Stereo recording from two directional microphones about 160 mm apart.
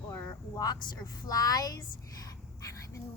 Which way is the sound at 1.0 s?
25° left (ahead or behind).